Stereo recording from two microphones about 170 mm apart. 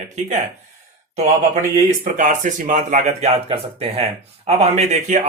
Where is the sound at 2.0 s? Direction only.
50° right (ahead or behind).